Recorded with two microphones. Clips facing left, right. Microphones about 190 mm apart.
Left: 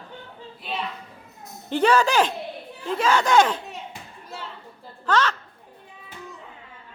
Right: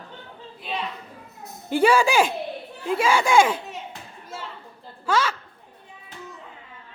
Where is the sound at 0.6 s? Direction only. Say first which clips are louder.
Right 1 dB; centre (ahead or behind).